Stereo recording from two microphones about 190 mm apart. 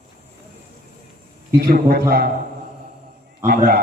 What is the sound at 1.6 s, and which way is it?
Speech, 50° right (ahead or behind).